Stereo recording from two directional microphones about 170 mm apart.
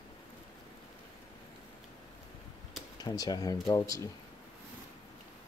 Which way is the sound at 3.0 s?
25° left (ahead or behind).